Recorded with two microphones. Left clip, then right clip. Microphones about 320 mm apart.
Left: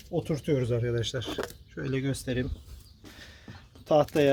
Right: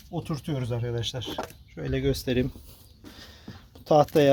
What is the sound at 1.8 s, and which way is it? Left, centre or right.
Speech, right.